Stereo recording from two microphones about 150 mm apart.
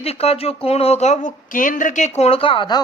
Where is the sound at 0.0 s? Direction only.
40° left (ahead or behind).